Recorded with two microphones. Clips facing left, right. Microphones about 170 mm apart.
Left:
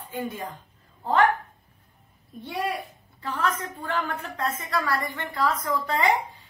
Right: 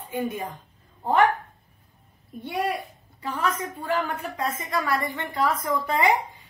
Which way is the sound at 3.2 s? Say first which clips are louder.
Right 1 dB; 15° right (ahead or behind).